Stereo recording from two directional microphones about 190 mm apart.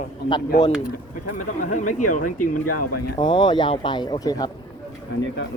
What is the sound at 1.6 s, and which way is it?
Speech, 40° left (ahead or behind).